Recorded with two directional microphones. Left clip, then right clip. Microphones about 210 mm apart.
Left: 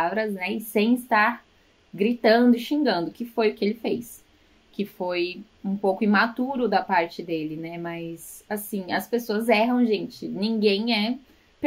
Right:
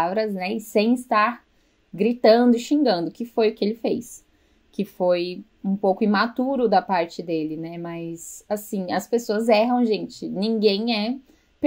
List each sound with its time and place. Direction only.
0.0 s speech: 40° right (ahead or behind)
4.9 s speech: 35° right (ahead or behind)